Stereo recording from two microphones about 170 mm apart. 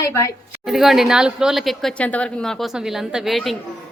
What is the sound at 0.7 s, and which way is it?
Speech, centre (ahead or behind).